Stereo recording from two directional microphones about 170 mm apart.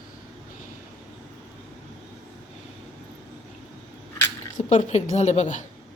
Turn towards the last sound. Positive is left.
turn(degrees=45)  # may be behind; listen again after turning